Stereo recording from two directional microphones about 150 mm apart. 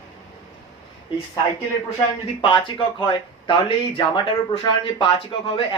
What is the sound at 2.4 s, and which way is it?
Speech, 35° left (ahead or behind).